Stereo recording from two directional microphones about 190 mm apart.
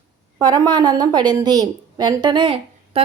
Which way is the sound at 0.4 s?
20° right (ahead or behind).